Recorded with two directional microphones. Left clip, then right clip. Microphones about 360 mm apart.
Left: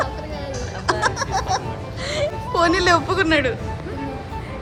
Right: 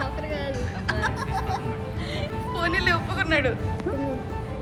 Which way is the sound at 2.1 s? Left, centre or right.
Centre.